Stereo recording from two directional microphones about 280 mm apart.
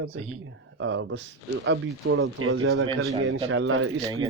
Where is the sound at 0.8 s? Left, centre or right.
Right.